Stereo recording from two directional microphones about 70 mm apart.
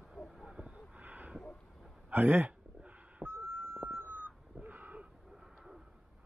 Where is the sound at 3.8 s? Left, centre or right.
Right.